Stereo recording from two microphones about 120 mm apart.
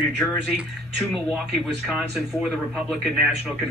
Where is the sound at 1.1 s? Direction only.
Centre (ahead or behind).